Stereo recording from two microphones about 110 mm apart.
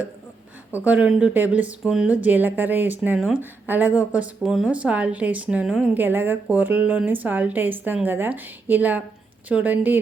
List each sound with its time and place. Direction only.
0.7 s speech: 15° right (ahead or behind)
3.2 s speech: 5° right (ahead or behind)